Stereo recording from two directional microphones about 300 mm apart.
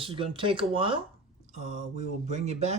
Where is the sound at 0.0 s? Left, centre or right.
Centre.